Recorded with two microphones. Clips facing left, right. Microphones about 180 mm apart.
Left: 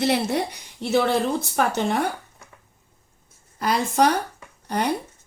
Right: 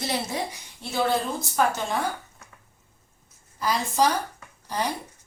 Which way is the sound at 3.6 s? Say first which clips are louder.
Left 3 dB; 60° left (ahead or behind).